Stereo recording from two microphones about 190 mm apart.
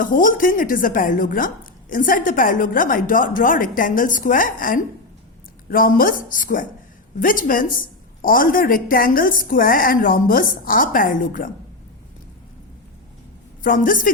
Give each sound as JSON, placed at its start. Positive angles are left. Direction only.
{"t": 0.0, "sound": "a woman's voice", "side_deg": 45}
{"t": 13.7, "sound": "a woman's voice", "side_deg": 45}